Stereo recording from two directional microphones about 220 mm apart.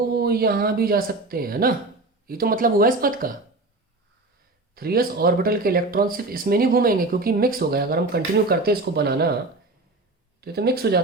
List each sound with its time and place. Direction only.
0.1 s speech: 45° right (ahead or behind)
4.7 s speech: 45° right (ahead or behind)
10.4 s speech: 45° right (ahead or behind)